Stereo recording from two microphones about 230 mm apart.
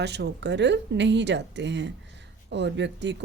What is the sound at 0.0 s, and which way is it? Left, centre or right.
Speech, right.